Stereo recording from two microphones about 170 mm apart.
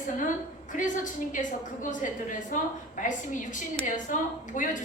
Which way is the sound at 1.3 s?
50° left (ahead or behind).